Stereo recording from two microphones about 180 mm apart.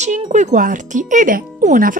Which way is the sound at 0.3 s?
40° right (ahead or behind).